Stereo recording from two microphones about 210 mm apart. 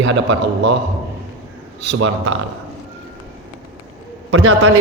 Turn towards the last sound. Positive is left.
turn(degrees=-90)